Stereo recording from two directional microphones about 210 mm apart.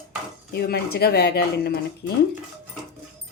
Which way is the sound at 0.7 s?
50° left (ahead or behind).